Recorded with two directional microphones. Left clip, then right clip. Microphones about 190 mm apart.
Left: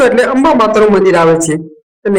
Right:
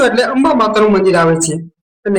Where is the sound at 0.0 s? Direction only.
15° left (ahead or behind).